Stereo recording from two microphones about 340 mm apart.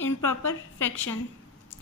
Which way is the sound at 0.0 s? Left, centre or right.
Left.